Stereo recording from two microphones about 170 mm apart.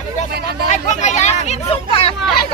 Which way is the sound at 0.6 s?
45° left (ahead or behind).